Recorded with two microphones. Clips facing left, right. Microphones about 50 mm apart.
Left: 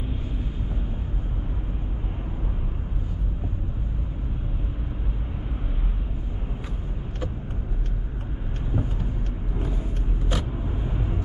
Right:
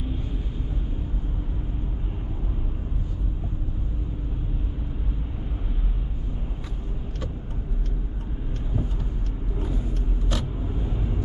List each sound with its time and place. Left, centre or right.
10.3 s vehicle: centre